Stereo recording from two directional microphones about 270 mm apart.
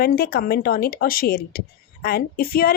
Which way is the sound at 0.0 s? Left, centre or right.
Left.